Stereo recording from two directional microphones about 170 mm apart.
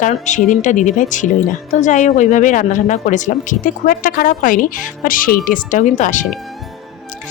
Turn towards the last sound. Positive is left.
turn(degrees=45)  # may be behind; listen again after turning